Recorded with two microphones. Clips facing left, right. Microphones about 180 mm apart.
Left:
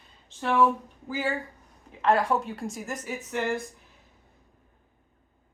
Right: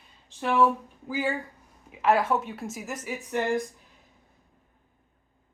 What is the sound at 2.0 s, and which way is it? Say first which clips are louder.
A woman's voice: even; 5° right (ahead or behind).